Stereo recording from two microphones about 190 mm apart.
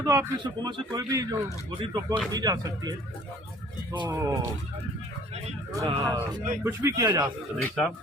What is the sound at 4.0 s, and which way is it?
Speech, 20° right (ahead or behind).